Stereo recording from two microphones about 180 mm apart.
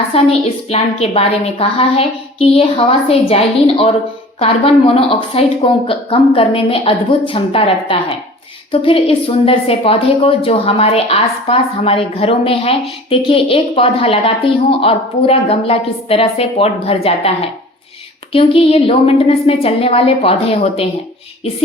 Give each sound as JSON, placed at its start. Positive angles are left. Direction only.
{"t": 0.1, "sound": "a woman's voice", "side_deg": 35}